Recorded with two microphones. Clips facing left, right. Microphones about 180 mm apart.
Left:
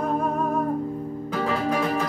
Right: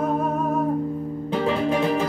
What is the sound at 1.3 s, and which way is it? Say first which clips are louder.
Music: right 3 dB; 25° right (ahead or behind).